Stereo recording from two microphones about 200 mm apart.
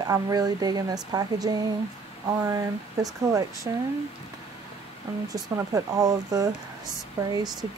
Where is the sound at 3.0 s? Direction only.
15° right (ahead or behind).